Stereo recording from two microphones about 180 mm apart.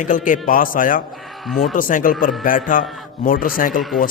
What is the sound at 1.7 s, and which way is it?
A man's voice, 50° left (ahead or behind).